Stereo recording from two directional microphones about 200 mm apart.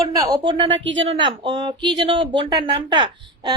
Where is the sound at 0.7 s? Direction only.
65° right (ahead or behind).